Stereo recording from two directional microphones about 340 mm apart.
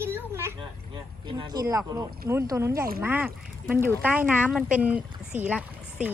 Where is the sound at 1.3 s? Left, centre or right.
Centre.